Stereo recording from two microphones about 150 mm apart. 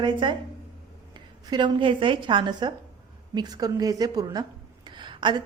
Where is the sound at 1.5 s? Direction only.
30° right (ahead or behind).